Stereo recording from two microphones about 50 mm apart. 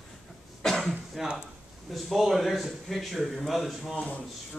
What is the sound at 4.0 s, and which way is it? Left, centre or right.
Speech, left.